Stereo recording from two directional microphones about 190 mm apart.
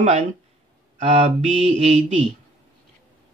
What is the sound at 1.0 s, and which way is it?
Mantra, 40° right (ahead or behind).